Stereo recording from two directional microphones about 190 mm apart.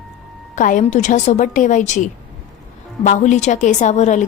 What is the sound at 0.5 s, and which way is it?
A woman's voice, 40° left (ahead or behind).